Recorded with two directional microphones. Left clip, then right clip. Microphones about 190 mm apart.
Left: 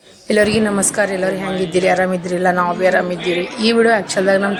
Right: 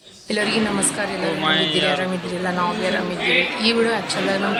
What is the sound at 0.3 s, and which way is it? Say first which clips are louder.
A woman's voice: left 6 dB; 25° left (ahead or behind).